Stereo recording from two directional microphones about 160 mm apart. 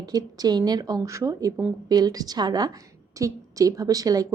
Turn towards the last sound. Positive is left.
turn(degrees=-20)  # may be behind; listen again after turning